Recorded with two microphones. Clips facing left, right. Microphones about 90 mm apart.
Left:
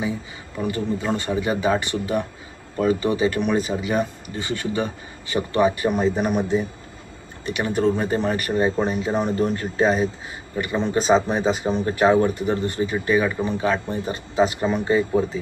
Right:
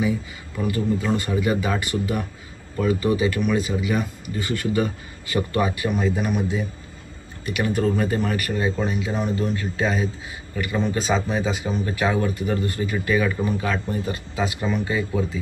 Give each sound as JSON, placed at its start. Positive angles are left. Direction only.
{"t": 0.0, "sound": "speech", "side_deg": 30}